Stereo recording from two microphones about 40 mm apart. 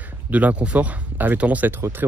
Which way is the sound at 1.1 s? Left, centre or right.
Right.